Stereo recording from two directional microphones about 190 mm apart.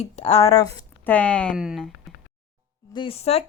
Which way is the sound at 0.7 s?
10° left (ahead or behind).